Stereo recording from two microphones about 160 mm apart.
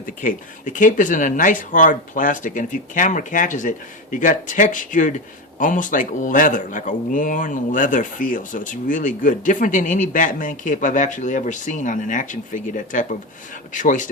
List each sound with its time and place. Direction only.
0.0 s speech: 55° left (ahead or behind)